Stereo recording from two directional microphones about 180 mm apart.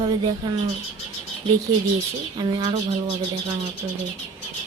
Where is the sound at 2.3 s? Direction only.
25° right (ahead or behind).